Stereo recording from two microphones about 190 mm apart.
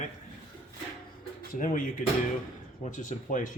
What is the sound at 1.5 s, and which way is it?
Speech, 45° left (ahead or behind).